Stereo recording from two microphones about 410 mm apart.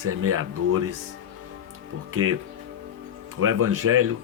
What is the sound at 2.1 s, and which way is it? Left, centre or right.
Speech, right.